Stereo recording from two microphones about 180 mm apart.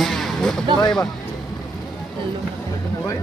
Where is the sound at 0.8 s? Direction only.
20° left (ahead or behind).